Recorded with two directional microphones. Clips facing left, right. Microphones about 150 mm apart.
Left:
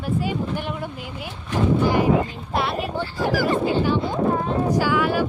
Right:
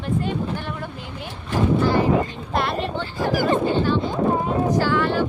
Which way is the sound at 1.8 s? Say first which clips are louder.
Left 1 dB; 15° left (ahead or behind).